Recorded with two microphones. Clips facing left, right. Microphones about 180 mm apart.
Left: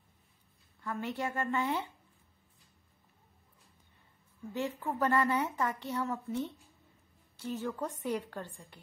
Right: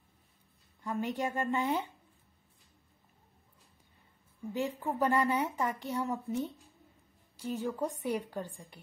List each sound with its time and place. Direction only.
0.8 s speech: 15° right (ahead or behind)
4.6 s speech: 15° right (ahead or behind)